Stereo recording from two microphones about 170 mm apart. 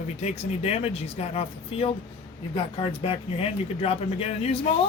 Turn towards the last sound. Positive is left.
turn(degrees=35)  # may be behind; listen again after turning